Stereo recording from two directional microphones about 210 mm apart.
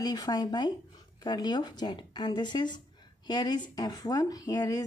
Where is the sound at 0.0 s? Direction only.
20° left (ahead or behind).